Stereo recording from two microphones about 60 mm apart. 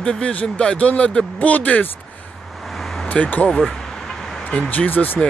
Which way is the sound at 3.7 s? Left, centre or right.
Centre.